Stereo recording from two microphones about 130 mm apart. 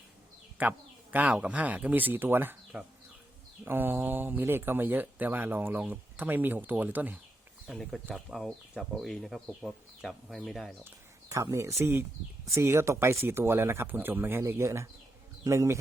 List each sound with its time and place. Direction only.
0.6 s speech: 10° right (ahead or behind)
7.7 s speech: centre (ahead or behind)
10.8 s speech: 25° right (ahead or behind)